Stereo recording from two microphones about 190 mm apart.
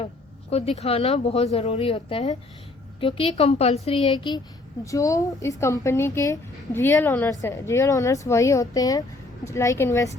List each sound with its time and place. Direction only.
0.5 s a woman's voice: 35° left (ahead or behind); by 10.2 s 15° left (ahead or behind)